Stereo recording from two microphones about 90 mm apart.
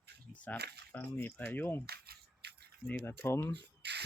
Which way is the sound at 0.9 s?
20° left (ahead or behind).